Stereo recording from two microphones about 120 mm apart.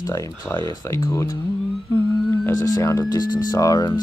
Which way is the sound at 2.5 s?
30° left (ahead or behind).